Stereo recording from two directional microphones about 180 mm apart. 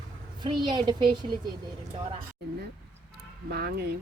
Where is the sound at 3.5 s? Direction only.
60° right (ahead or behind).